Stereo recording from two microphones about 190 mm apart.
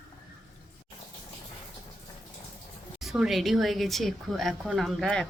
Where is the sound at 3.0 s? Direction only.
Centre (ahead or behind).